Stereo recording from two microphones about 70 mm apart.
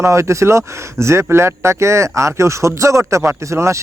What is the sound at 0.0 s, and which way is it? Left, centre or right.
A man's voice, right.